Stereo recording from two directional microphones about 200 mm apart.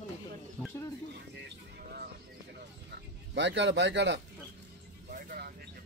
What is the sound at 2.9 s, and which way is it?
Speech, 60° right (ahead or behind).